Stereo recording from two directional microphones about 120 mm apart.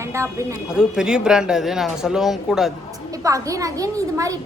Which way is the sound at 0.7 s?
5° right (ahead or behind).